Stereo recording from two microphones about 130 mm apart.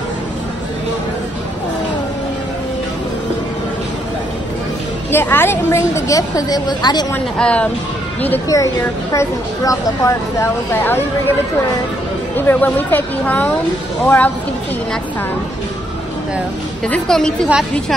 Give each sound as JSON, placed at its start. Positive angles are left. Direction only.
{"t": 5.1, "sound": "speech", "side_deg": 15}
{"t": 7.3, "sound": "speech", "side_deg": 10}
{"t": 9.1, "sound": "speech", "side_deg": 25}
{"t": 12.4, "sound": "speech", "side_deg": 15}
{"t": 16.8, "sound": "speech", "side_deg": 5}